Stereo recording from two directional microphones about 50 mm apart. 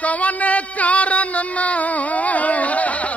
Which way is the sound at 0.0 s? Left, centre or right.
Left.